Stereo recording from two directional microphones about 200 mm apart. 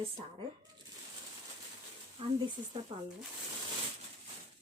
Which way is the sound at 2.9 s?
20° right (ahead or behind).